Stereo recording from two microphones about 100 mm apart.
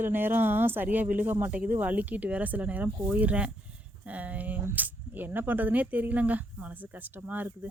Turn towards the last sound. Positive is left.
turn(degrees=-20)  # may be behind; listen again after turning